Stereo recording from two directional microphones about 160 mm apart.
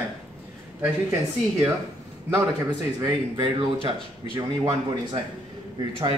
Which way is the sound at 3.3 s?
30° right (ahead or behind).